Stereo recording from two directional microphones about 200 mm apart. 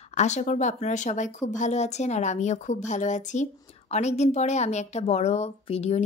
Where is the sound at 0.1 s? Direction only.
35° left (ahead or behind).